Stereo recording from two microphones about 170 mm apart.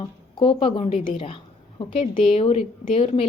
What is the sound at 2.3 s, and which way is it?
Speech, 30° left (ahead or behind).